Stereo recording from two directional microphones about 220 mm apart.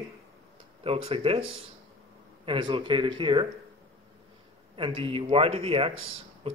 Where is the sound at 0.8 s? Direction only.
25° right (ahead or behind).